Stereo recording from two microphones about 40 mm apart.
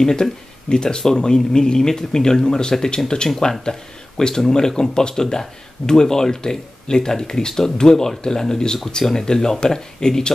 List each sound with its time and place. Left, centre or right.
0.0 s speech: centre